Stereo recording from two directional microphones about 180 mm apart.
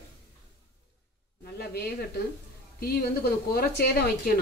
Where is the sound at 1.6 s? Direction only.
60° left (ahead or behind).